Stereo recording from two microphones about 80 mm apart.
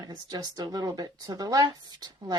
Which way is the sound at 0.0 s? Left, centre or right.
Right.